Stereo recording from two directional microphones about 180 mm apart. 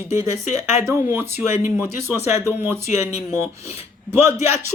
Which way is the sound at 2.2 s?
35° left (ahead or behind).